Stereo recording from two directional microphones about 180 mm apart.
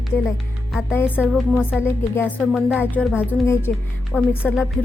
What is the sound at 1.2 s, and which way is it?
Speech, 5° right (ahead or behind).